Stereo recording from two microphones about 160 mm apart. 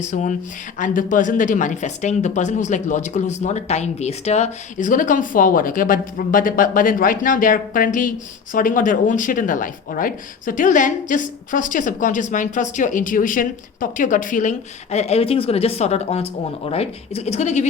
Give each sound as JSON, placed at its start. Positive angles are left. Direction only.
{"t": 0.0, "sound": "speech", "side_deg": 50}